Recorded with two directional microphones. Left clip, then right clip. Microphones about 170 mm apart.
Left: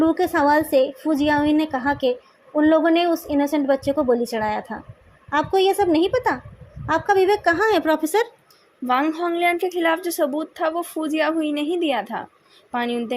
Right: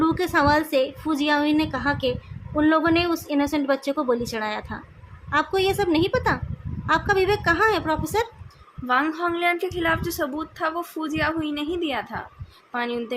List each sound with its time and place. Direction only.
0.0 s a woman's voice: 15° left (ahead or behind); by 13.1 s 35° left (ahead or behind)